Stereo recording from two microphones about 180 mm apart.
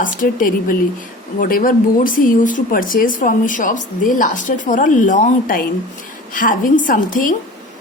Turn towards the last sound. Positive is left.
turn(degrees=50)  # may be behind; listen again after turning